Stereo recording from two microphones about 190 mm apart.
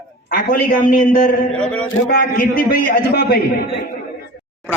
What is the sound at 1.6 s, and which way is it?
Speech, 5° left (ahead or behind).